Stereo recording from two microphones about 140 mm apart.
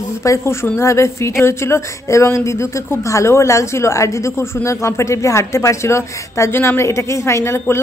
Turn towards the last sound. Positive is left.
turn(degrees=20)  # may be behind; listen again after turning